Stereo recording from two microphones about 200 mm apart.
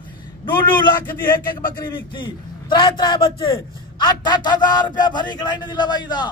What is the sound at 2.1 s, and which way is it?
A man's voice, 25° left (ahead or behind).